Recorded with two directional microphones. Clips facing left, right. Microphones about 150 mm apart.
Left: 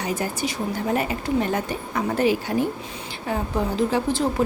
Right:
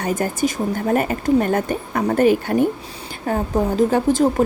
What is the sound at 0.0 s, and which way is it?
Speech, 50° right (ahead or behind).